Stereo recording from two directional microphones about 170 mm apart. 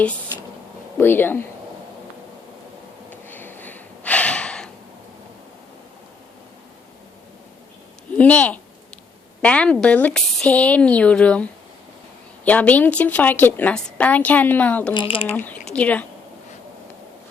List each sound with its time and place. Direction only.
0.9 s a woman's voice: 10° left (ahead or behind)
3.1 s snort: 10° left (ahead or behind)
8.2 s a woman's voice: 10° left (ahead or behind)
12.5 s a woman's voice: 10° left (ahead or behind)
14.9 s speech: 30° left (ahead or behind)
15.4 s a woman's voice: 10° left (ahead or behind)